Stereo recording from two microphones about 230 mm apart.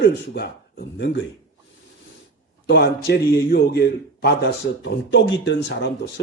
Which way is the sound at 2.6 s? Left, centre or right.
Left.